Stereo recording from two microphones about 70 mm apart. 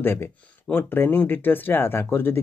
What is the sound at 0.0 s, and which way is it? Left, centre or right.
Speech, left.